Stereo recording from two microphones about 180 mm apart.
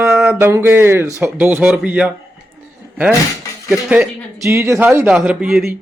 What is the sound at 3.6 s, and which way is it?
A man's voice, 5° right (ahead or behind).